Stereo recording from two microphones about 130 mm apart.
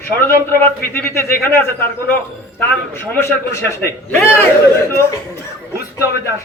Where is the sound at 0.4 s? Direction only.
15° left (ahead or behind).